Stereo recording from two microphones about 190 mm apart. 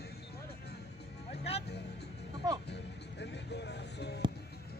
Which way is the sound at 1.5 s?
30° left (ahead or behind).